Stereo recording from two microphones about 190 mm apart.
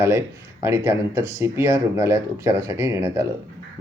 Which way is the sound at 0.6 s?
15° right (ahead or behind).